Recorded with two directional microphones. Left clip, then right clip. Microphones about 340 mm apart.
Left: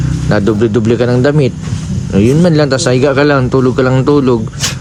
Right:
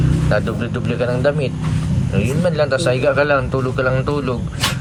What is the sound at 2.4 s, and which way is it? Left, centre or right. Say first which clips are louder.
A man's voice: left 6 dB; left.